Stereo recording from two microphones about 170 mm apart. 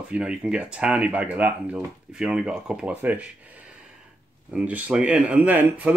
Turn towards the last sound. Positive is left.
turn(degrees=-10)  # may be behind; listen again after turning